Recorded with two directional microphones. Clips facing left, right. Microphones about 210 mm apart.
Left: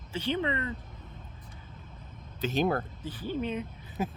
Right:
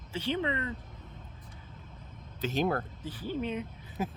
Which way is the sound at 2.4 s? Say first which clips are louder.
Left 2 dB; 20° left (ahead or behind).